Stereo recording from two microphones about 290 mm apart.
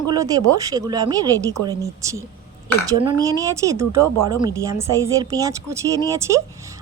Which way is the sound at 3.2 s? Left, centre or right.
Centre.